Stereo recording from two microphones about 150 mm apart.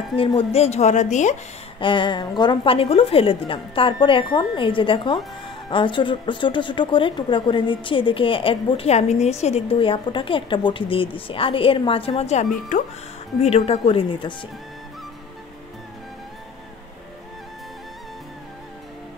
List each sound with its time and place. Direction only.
0.1 s speech: 35° left (ahead or behind); by 1.3 s 50° left (ahead or behind)
1.8 s a woman's voice: 35° left (ahead or behind)
12.7 s speech: 55° left (ahead or behind)
13.4 s a woman's voice: 45° left (ahead or behind)